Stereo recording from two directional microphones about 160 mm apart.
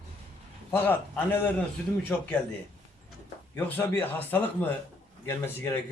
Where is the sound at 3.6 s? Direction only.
10° left (ahead or behind).